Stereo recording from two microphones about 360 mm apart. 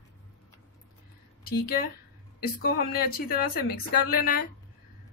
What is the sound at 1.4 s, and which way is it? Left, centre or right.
A woman's voice, left.